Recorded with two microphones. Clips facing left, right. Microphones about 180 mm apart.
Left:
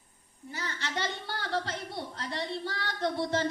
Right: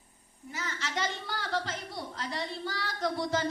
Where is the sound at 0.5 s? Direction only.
30° left (ahead or behind).